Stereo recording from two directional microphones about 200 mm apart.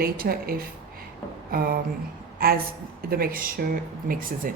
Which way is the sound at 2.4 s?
50° right (ahead or behind).